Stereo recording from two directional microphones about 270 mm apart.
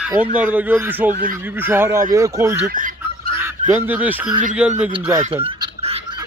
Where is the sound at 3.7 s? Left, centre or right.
Centre.